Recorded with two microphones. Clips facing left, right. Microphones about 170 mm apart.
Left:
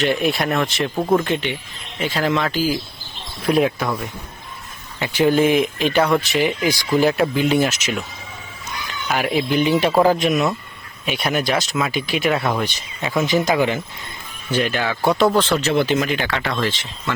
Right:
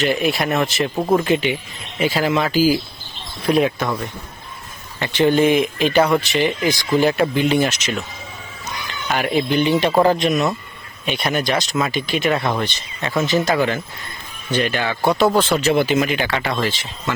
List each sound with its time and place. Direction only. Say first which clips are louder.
0.0 s speech: even; centre (ahead or behind)
9.0 s speech: right 1 dB; centre (ahead or behind)
14.5 s speech: even; centre (ahead or behind)
15.3 s speech: right 1 dB; 10° right (ahead or behind)